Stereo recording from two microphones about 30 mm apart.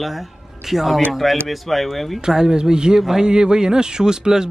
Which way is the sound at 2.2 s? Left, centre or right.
Right.